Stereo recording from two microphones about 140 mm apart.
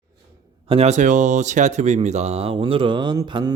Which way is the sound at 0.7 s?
50° right (ahead or behind).